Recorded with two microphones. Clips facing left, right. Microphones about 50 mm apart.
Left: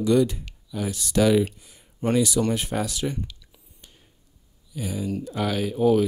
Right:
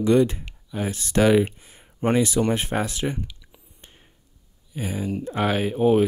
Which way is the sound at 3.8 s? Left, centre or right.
Right.